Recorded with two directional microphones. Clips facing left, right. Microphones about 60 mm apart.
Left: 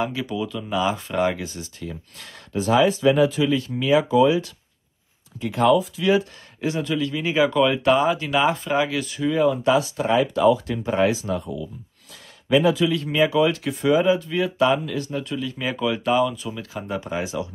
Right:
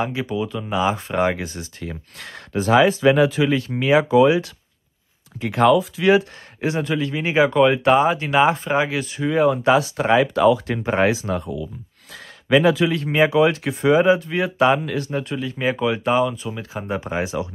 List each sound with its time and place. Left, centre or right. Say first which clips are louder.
0.0 s speech: right 2 dB; right
6.0 s speech: right 6 dB; right
9.4 s speech: right 3 dB; right
10.9 s speech: right 2 dB; right
12.1 s a sound: right 2 dB; right
12.9 s speech: right 2 dB; right
17.0 s speech: right 3 dB; right